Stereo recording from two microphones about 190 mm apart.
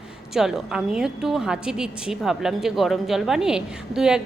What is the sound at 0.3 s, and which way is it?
A woman's voice, centre (ahead or behind).